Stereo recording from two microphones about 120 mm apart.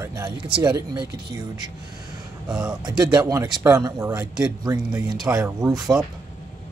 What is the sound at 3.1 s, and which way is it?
Speech, 30° right (ahead or behind).